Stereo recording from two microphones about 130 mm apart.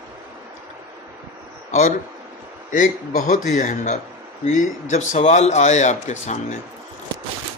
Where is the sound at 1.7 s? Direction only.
70° left (ahead or behind).